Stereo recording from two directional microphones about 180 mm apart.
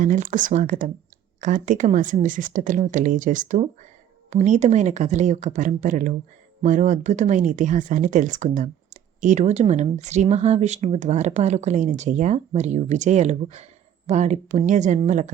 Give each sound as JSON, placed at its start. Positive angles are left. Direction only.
{"t": 0.0, "sound": "a woman's voice", "side_deg": -45}